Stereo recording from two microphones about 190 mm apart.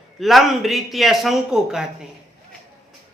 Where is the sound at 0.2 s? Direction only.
Centre (ahead or behind).